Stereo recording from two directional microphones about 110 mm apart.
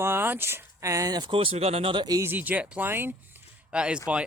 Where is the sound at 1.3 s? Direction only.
60° right (ahead or behind).